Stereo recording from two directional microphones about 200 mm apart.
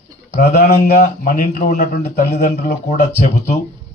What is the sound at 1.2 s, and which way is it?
A man's voice, 40° left (ahead or behind).